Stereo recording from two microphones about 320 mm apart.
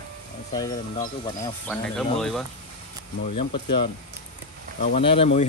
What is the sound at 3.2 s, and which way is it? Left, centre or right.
Speech, centre.